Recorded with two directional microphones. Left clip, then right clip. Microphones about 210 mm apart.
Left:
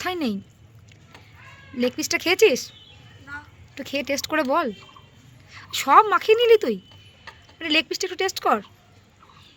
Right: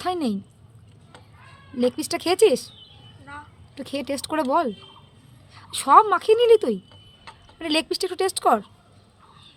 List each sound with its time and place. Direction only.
0.0 s speech: 10° right (ahead or behind)
1.7 s speech: 10° right (ahead or behind)
3.8 s speech: 10° right (ahead or behind)